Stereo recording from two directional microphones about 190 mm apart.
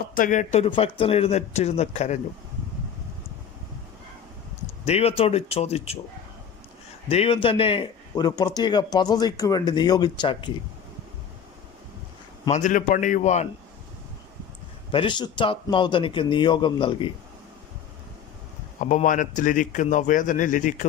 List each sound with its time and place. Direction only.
0.1 s speech: 45° left (ahead or behind)
4.9 s speech: 35° left (ahead or behind)
7.1 s a man's voice: 30° left (ahead or behind)
12.5 s speech: 40° left (ahead or behind)
14.9 s a man's voice: 25° left (ahead or behind)
18.8 s a man's voice: 40° left (ahead or behind)